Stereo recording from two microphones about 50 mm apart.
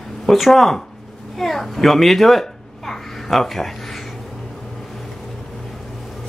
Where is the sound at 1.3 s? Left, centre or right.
Centre.